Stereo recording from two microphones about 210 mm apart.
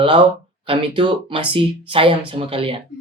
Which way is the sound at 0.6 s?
25° right (ahead or behind).